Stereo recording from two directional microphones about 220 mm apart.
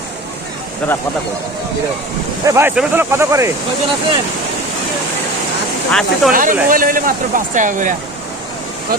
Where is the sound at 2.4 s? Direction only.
10° right (ahead or behind).